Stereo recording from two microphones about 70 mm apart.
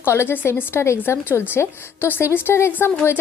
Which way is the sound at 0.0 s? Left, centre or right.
Left.